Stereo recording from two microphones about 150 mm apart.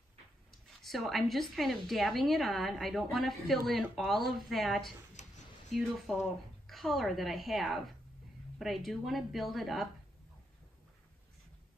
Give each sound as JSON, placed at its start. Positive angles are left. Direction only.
{"t": 0.5, "sound": "a woman's voice", "side_deg": 0}
{"t": 5.2, "sound": "a sound", "side_deg": 50}
{"t": 5.7, "sound": "a woman's voice", "side_deg": 0}